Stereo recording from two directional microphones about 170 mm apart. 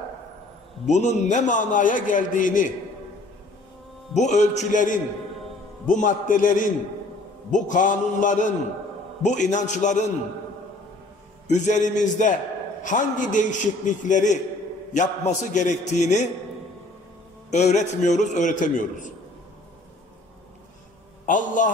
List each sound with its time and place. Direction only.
0.8 s a man's voice: 45° left (ahead or behind)
4.1 s a man's voice: 45° left (ahead or behind)
11.4 s a man's voice: 45° left (ahead or behind)
17.5 s a man's voice: 45° left (ahead or behind)
21.6 s a man's voice: 50° left (ahead or behind)